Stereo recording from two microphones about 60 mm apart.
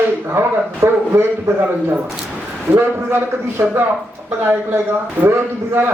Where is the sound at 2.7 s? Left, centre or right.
Right.